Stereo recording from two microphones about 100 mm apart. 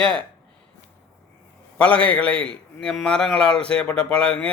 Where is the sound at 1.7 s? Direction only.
15° left (ahead or behind).